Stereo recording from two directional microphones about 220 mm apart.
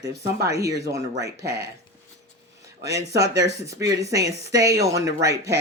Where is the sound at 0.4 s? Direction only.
15° right (ahead or behind).